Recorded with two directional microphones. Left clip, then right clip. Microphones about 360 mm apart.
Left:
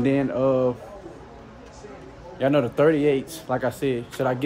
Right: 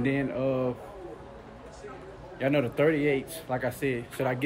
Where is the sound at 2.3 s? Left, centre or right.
Centre.